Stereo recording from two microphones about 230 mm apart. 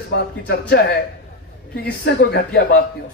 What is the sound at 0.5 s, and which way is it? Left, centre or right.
A man's voice, left.